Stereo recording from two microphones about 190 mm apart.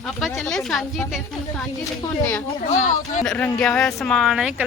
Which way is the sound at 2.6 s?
45° left (ahead or behind).